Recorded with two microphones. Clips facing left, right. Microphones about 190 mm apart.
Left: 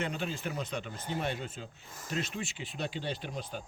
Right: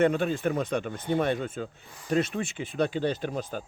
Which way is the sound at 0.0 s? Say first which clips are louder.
Right 11 dB; 50° right (ahead or behind).